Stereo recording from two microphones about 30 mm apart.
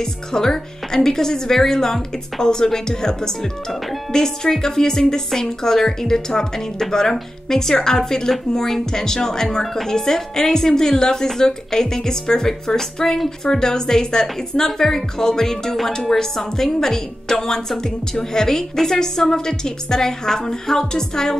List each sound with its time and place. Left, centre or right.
0.0 s a woman's voice: centre